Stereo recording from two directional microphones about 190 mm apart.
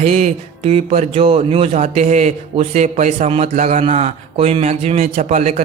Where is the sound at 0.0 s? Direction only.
35° right (ahead or behind).